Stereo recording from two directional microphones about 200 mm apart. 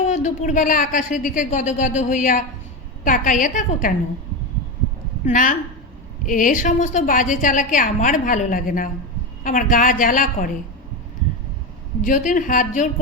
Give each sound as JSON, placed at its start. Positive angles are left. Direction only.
{"t": 0.0, "sound": "a woman's voice", "side_deg": 40}
{"t": 5.2, "sound": "a woman's voice", "side_deg": 40}
{"t": 12.0, "sound": "a woman's voice", "side_deg": 40}